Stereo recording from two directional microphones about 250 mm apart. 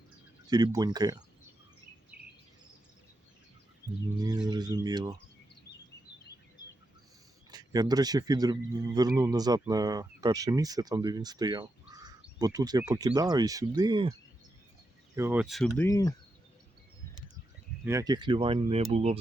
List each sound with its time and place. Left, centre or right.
0.5 s speech: centre
4.2 s speech: centre
7.5 s speech: centre
15.1 s speech: centre
15.9 s speech: centre
17.8 s speech: centre